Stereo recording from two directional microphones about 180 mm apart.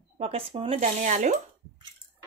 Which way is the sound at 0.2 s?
35° right (ahead or behind).